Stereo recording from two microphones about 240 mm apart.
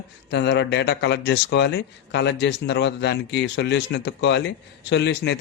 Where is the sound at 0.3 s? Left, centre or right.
Left.